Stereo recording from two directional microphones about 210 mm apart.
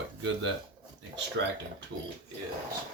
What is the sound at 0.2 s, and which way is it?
Speech, 65° right (ahead or behind).